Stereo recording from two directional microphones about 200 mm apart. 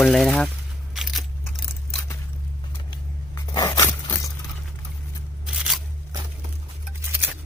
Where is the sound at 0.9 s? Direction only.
Centre (ahead or behind).